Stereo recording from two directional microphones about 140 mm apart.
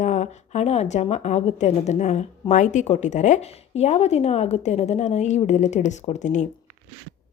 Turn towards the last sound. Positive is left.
turn(degrees=55)  # may be behind; listen again after turning